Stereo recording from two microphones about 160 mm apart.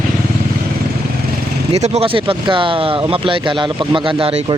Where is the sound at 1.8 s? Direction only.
40° right (ahead or behind).